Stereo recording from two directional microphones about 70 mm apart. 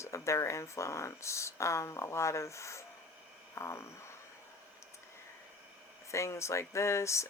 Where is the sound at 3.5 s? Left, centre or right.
Left.